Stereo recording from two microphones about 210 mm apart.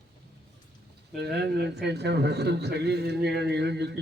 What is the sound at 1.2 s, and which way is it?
A man's voice, 50° right (ahead or behind).